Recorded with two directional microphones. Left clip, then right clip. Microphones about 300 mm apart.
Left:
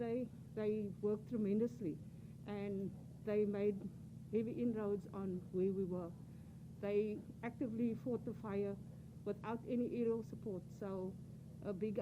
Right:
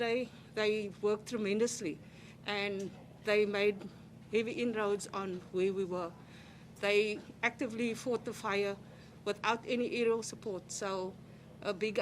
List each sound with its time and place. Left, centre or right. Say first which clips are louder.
0.0 s speech: right 8 dB; centre